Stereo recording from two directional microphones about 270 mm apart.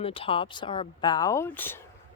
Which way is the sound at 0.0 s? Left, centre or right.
Centre.